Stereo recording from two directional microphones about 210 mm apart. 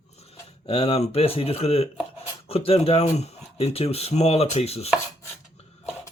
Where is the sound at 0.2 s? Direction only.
30° left (ahead or behind).